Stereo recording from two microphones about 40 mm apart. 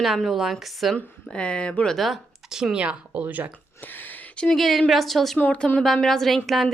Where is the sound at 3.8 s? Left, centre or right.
Left.